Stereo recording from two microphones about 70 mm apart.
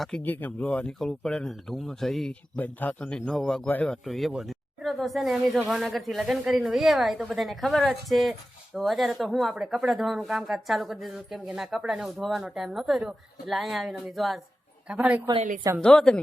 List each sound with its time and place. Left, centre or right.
0.2 s a woman's voice: left; by 2.3 s centre
2.6 s a man's voice: left; by 14.4 s centre
14.8 s speech: centre
15.8 s a man's voice: centre